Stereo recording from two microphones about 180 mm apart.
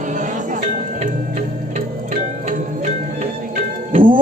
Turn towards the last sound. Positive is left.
turn(degrees=-50)  # may be behind; listen again after turning